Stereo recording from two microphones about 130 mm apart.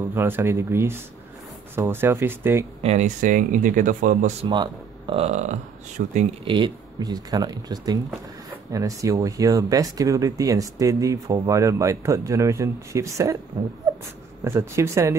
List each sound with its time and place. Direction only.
0.1 s speech: 20° right (ahead or behind)
2.8 s speech: 55° right (ahead or behind)
3.2 s speech: 90° right
4.5 s speech: 35° right (ahead or behind)
5.2 s speech: 65° right (ahead or behind)
6.4 s speech: 40° right (ahead or behind)
14.4 s speech: 20° right (ahead or behind)